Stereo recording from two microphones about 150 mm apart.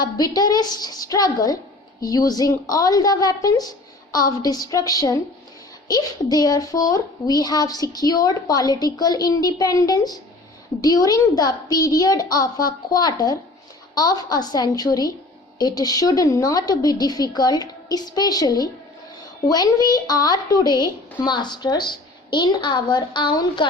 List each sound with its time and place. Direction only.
0.0 s a woman's voice: 25° left (ahead or behind)